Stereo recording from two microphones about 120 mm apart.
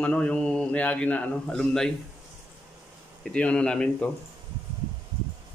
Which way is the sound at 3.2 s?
10° left (ahead or behind).